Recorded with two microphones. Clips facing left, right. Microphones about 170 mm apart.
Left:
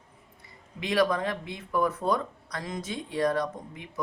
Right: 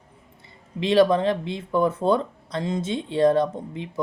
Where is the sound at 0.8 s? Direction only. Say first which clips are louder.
Right 7 dB; 25° right (ahead or behind).